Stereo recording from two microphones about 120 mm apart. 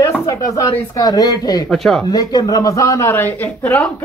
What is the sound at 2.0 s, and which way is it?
Speech, 30° left (ahead or behind).